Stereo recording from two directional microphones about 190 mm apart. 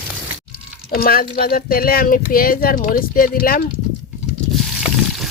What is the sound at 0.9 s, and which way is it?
Speech, 50° left (ahead or behind).